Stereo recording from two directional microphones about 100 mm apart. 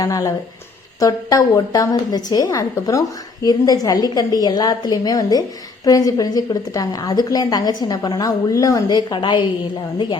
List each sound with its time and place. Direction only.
0.0 s a woman's voice: 35° left (ahead or behind); by 9.4 s 50° left (ahead or behind)